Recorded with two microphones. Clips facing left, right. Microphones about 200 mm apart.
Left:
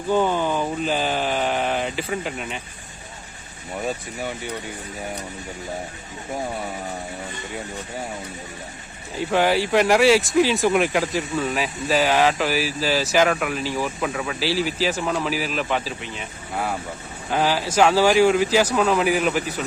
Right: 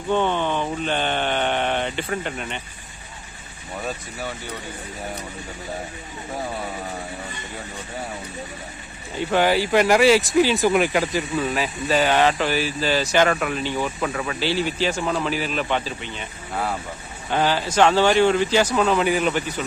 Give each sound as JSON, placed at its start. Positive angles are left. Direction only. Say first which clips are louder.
{"t": 0.1, "sound": "speech", "louder": "left 1 dB", "side_deg": 5}
{"t": 3.8, "sound": "speech", "louder": "left 3 dB", "side_deg": 15}
{"t": 9.1, "sound": "speech", "louder": "even", "side_deg": 0}